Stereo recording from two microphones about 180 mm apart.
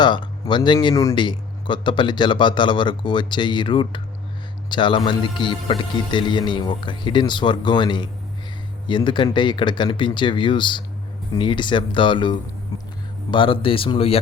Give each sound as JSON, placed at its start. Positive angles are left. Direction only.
{"t": 0.0, "sound": "speech", "side_deg": 25}